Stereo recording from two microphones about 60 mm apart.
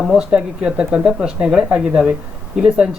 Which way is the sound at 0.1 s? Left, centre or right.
Centre.